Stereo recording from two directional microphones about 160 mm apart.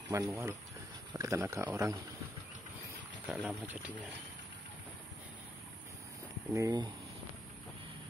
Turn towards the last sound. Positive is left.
turn(degrees=-20)  # may be behind; listen again after turning